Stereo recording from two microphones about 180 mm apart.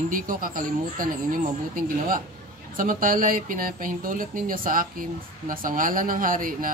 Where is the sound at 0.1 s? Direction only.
50° right (ahead or behind).